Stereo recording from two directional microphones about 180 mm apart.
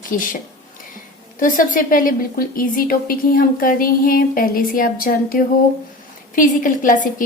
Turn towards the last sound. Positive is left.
turn(degrees=45)  # may be behind; listen again after turning